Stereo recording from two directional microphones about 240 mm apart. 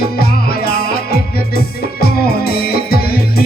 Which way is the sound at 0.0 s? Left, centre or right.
Left.